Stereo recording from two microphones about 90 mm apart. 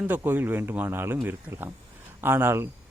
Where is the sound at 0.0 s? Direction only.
20° right (ahead or behind).